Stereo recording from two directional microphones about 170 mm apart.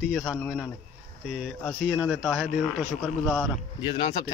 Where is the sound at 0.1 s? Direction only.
Centre (ahead or behind).